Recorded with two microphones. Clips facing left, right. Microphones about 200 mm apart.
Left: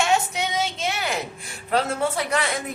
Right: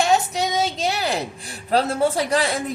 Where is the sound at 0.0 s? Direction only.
35° right (ahead or behind).